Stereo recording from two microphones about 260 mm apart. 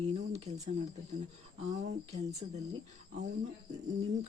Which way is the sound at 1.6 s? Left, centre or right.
Right.